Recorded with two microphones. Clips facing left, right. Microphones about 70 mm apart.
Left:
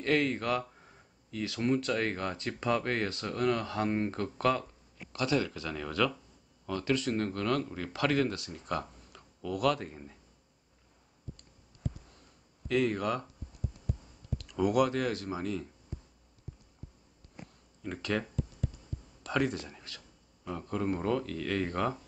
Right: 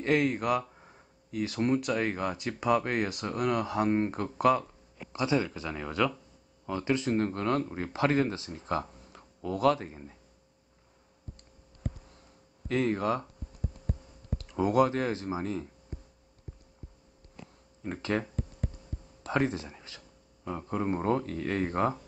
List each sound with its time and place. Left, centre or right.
0.0 s speech: right
1.3 s speech: right
11.8 s a sound: right
12.6 s speech: right
14.4 s speech: right
17.4 s a sound: left
17.8 s speech: right
19.2 s speech: right